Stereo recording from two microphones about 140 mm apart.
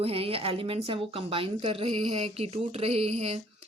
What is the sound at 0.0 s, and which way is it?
A woman's voice, 45° right (ahead or behind).